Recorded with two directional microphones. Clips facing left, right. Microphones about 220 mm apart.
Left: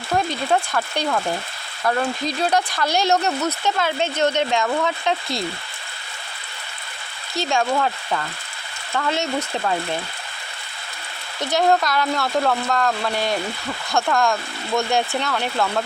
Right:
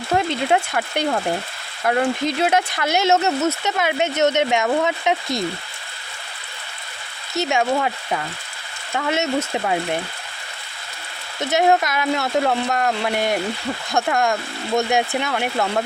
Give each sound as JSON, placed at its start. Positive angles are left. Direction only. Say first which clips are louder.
{"t": 0.1, "sound": "speech", "louder": "right 2 dB", "side_deg": -25}
{"t": 7.3, "sound": "speech", "louder": "right 1 dB", "side_deg": -20}
{"t": 11.3, "sound": "speech", "louder": "right 1 dB", "side_deg": -20}